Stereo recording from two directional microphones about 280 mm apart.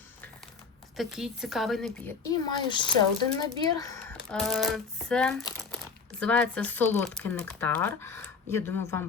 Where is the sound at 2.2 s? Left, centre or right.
Centre.